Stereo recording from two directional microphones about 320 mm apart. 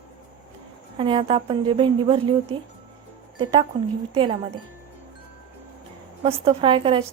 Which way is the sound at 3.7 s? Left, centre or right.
Centre.